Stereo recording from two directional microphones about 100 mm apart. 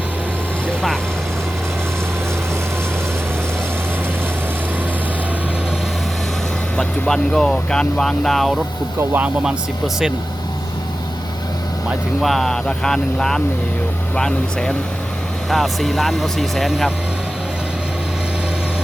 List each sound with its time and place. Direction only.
6.7 s speech: 5° left (ahead or behind)
9.0 s speech: 20° right (ahead or behind)
9.4 s speech: 5° right (ahead or behind)
12.2 s speech: centre (ahead or behind)